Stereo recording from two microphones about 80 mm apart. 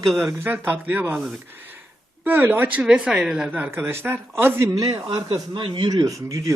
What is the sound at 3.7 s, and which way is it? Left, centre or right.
A man's voice, right.